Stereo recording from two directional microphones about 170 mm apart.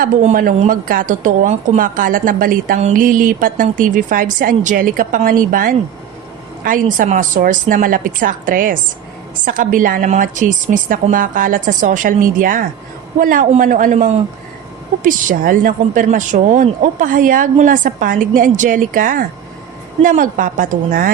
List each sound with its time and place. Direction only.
0.0 s speech: 50° right (ahead or behind)